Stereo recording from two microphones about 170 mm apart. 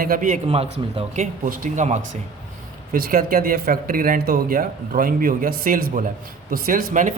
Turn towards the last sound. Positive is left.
turn(degrees=-50)  # may be behind; listen again after turning